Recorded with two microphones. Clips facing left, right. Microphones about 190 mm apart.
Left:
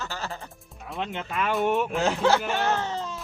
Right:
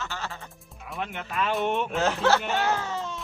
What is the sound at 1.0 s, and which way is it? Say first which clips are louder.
Speech: left 1 dB; 20° left (ahead or behind).